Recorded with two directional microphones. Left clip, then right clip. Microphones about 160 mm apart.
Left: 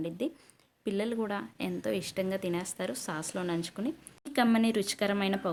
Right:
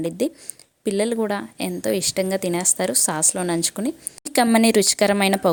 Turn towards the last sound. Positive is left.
turn(degrees=-50)  # may be behind; listen again after turning